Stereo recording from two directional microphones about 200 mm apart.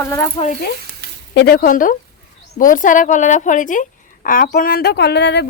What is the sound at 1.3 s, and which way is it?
A woman's voice, 50° left (ahead or behind).